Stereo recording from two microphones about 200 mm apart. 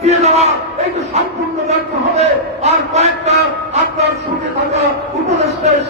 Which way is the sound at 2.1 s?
30° right (ahead or behind).